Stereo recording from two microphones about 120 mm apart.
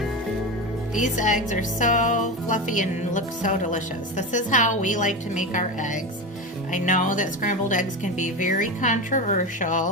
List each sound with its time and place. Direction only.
0.9 s speech: 90° left